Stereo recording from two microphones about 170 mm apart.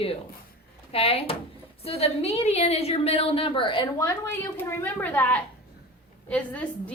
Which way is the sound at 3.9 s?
15° left (ahead or behind).